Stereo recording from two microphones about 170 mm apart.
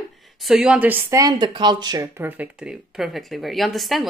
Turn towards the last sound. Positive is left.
turn(degrees=0)  # may be behind; listen again after turning